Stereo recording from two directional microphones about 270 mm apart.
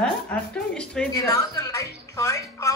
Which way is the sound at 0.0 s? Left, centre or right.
Centre.